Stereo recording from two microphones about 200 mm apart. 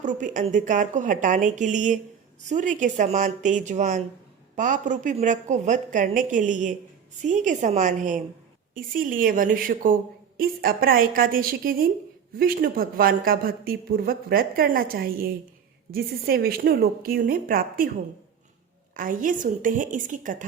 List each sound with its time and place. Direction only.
0.0 s a woman's voice: 40° right (ahead or behind)
18.9 s a woman's voice: 45° right (ahead or behind)